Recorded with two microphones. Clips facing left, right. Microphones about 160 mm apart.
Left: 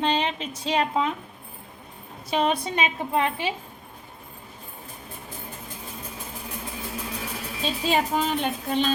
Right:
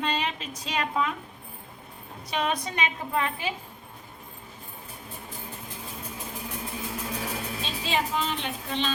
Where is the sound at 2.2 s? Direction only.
30° left (ahead or behind).